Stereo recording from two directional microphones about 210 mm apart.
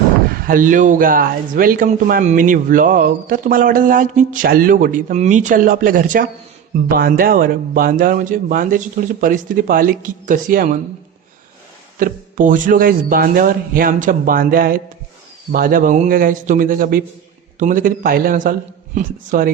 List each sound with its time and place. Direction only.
0.3 s speech: 45° right (ahead or behind)
11.9 s speech: 40° right (ahead or behind)